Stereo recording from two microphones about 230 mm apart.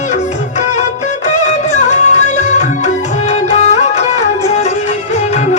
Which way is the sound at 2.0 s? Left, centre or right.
Left.